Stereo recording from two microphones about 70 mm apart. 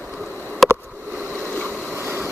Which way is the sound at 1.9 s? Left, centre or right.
Right.